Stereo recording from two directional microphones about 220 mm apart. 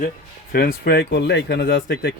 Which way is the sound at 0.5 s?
45° left (ahead or behind).